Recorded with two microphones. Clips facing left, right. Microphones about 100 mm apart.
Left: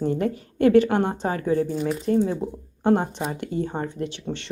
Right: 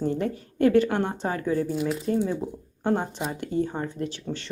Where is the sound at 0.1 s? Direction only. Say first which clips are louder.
Left 3 dB; 55° left (ahead or behind).